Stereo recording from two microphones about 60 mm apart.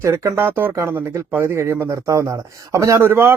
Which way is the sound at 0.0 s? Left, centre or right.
Right.